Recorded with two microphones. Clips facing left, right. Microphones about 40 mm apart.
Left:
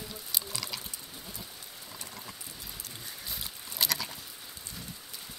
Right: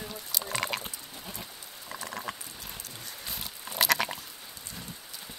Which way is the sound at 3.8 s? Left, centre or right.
Right.